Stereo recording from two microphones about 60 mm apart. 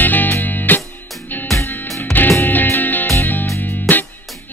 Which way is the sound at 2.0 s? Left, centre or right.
Left.